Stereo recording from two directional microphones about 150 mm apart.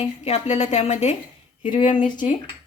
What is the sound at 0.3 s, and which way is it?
A woman's voice, 50° left (ahead or behind).